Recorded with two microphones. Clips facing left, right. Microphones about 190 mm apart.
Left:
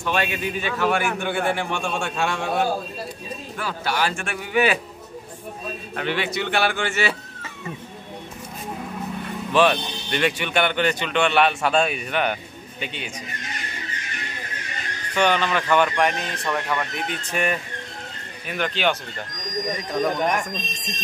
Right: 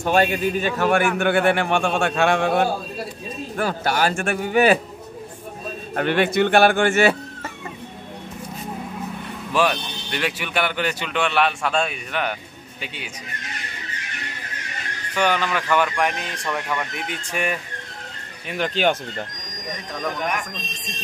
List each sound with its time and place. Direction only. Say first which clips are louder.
0.0 s speech: right 6 dB; 40° right (ahead or behind); by 2.6 s 60° right (ahead or behind)
3.5 s a man's voice: right 4 dB; 45° right (ahead or behind)
5.9 s a man's voice: right 7 dB; 50° right (ahead or behind)
9.5 s a man's voice: left 2 dB; 5° right (ahead or behind)
15.1 s speech: left 1 dB; 5° right (ahead or behind)
18.8 s a man's voice: right 3 dB; 45° right (ahead or behind)
19.9 s speech: left 4 dB; 20° left (ahead or behind)